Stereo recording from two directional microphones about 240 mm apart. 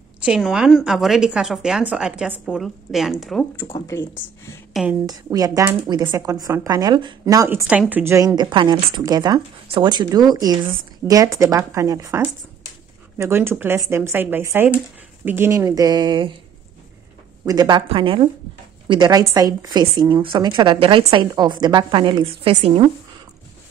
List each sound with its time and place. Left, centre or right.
0.2 s a woman's voice: centre
5.0 s speech: centre
17.5 s a woman's voice: centre